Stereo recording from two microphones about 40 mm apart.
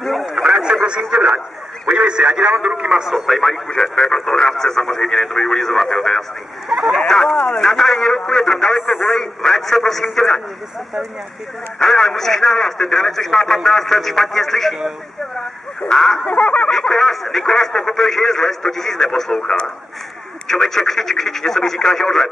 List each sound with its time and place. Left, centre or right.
0.3 s a sound: centre
0.8 s speech: right
3.2 s speech: centre
3.6 s speech: centre
6.7 s speech: right
7.3 s speech: left
11.8 s speech: centre
16.0 s speech: centre
16.3 s a sound: left
16.7 s speech: centre